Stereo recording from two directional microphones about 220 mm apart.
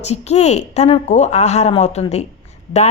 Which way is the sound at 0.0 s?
30° left (ahead or behind).